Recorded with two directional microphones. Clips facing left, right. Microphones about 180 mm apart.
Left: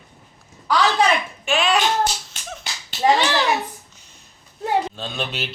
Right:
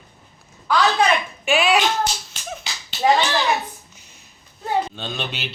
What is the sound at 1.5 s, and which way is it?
Speech, 5° right (ahead or behind).